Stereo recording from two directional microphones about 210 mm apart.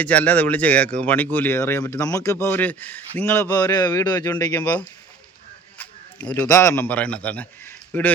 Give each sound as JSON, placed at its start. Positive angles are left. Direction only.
{"t": 0.0, "sound": "speech", "side_deg": 5}
{"t": 5.7, "sound": "a sound", "side_deg": 5}
{"t": 6.5, "sound": "speech", "side_deg": 15}